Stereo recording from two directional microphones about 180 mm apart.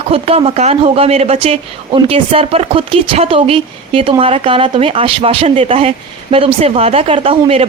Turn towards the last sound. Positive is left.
turn(degrees=-30)  # may be behind; listen again after turning